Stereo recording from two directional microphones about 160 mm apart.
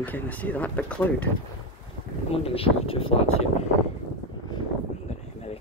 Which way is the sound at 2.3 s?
35° left (ahead or behind).